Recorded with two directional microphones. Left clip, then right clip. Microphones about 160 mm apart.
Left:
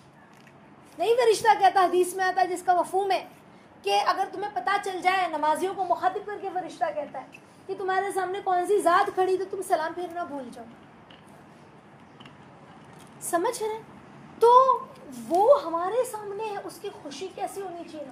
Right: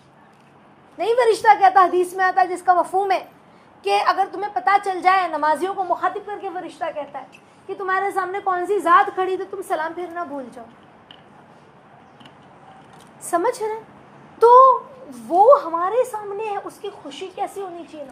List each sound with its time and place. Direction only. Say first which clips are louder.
0.9 s a woman's voice: right 4 dB; 20° right (ahead or behind)
3.8 s a woman's voice: right 6 dB; 20° right (ahead or behind)
13.2 s a woman's voice: right 6 dB; 10° right (ahead or behind)